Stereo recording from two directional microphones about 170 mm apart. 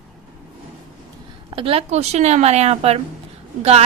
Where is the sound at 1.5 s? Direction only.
35° right (ahead or behind).